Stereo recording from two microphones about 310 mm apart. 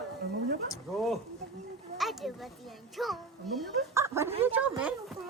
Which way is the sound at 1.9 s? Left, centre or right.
Centre.